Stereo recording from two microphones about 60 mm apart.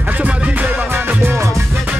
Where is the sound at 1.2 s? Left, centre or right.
Right.